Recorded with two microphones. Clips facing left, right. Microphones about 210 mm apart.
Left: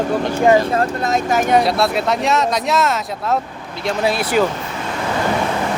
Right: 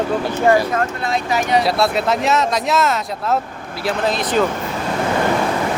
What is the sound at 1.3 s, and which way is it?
Speech, 50° left (ahead or behind).